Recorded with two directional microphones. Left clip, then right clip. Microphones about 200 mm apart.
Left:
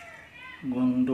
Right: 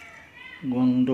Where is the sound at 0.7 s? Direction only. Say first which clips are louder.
Right 3 dB; 25° right (ahead or behind).